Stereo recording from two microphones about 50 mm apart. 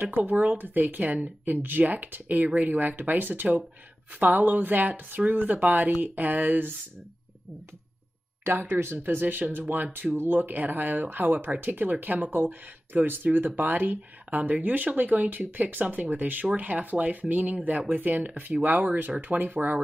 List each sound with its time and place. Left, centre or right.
0.0 s speech: right
8.5 s speech: right